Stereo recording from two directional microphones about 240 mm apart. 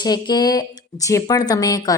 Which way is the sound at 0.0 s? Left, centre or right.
Centre.